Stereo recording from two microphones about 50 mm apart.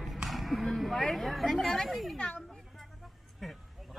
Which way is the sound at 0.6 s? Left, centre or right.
Centre.